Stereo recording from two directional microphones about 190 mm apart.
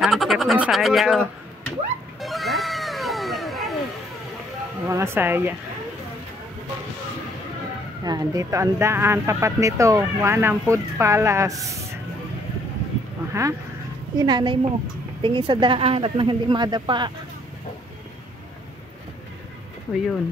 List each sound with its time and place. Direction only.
0.0 s a sound: centre (ahead or behind)
2.1 s cat: centre (ahead or behind)
4.8 s speech: 15° right (ahead or behind)
8.0 s speech: 20° right (ahead or behind)
13.3 s a woman's voice: 15° right (ahead or behind)
19.9 s speech: 5° left (ahead or behind)